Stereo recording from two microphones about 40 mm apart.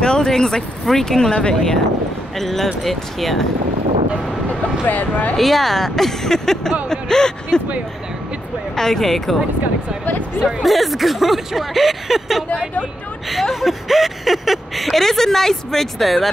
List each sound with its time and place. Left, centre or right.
0.0 s vehicle: centre
0.3 s speech: centre
2.3 s speech: centre
4.8 s speech: left
5.3 s speech: centre
8.7 s speech: centre
10.6 s speech: centre
15.0 s speech: centre